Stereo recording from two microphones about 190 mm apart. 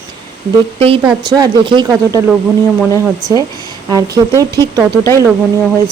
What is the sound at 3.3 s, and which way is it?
Speech, 20° left (ahead or behind).